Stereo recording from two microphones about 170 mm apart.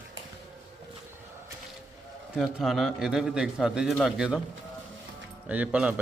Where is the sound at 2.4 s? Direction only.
Centre (ahead or behind).